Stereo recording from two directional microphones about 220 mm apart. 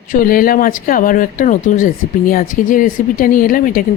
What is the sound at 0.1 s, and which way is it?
Speech, 40° left (ahead or behind).